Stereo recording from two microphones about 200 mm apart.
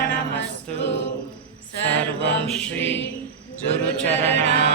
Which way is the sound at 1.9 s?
60° left (ahead or behind).